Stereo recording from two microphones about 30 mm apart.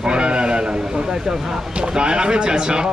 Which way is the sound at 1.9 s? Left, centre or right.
Right.